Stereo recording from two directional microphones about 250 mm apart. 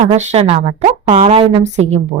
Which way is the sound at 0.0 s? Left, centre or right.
Right.